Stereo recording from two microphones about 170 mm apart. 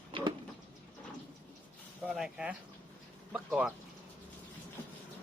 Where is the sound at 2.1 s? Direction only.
5° right (ahead or behind).